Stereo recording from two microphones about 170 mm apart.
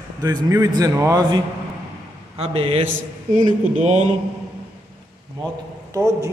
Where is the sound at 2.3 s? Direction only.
40° right (ahead or behind).